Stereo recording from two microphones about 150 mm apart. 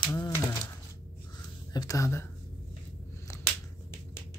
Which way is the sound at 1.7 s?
20° left (ahead or behind).